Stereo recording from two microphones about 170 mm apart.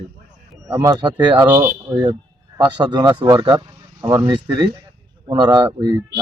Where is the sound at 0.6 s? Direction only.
20° right (ahead or behind).